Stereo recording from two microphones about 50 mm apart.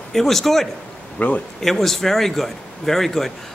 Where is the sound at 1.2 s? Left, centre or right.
Left.